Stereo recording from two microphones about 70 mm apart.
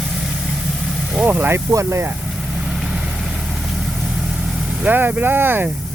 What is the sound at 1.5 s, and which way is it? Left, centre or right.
Speech, right.